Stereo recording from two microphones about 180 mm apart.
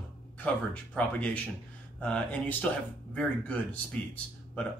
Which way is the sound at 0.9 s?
5° left (ahead or behind).